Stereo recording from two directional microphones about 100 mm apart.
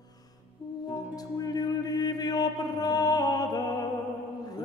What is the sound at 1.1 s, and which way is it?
Music, 40° left (ahead or behind).